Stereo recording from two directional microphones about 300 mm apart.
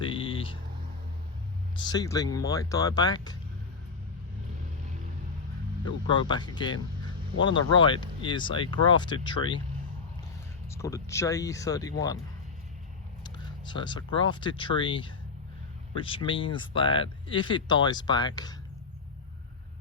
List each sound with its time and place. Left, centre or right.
0.0 s vehicle: centre
1.7 s speech: centre
5.8 s speech: centre
10.7 s speech: centre
13.2 s speech: centre